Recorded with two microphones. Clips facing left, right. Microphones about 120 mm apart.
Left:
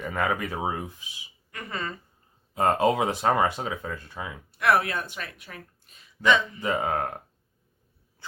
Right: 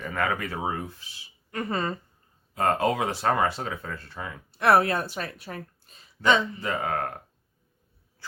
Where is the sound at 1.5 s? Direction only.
35° right (ahead or behind).